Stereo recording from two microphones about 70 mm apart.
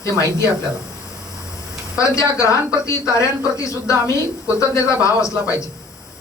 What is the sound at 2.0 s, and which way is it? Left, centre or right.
Speech, left.